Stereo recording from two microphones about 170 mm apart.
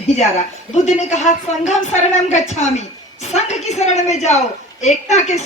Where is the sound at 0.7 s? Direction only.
45° left (ahead or behind).